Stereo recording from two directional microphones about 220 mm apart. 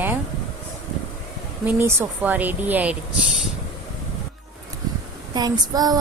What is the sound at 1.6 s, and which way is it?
Speech, 10° right (ahead or behind).